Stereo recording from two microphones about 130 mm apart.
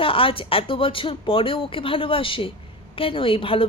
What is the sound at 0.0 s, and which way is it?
A woman's voice, 45° left (ahead or behind).